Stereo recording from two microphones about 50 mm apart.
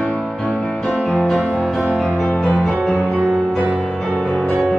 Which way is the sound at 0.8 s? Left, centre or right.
Centre.